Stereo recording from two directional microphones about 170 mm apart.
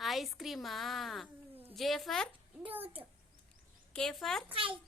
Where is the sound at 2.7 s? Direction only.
10° right (ahead or behind).